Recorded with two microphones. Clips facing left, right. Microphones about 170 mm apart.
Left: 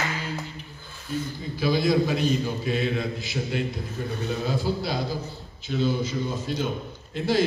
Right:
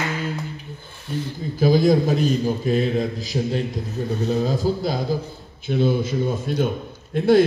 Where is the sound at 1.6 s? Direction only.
45° right (ahead or behind).